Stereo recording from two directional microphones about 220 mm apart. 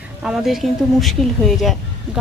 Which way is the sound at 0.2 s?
Centre (ahead or behind).